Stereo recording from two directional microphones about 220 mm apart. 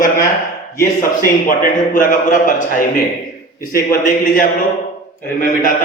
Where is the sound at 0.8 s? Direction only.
40° left (ahead or behind).